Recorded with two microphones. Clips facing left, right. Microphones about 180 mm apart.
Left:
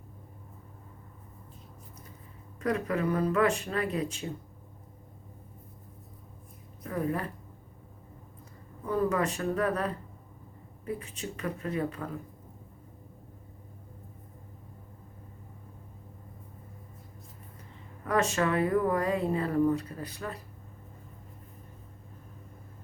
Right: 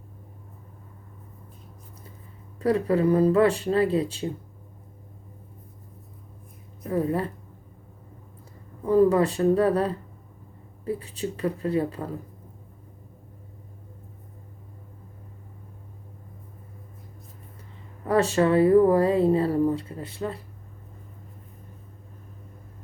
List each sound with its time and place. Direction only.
2.6 s speech: 30° right (ahead or behind)
6.8 s a woman's voice: 30° right (ahead or behind)
8.9 s speech: 30° right (ahead or behind)
18.0 s speech: 30° right (ahead or behind)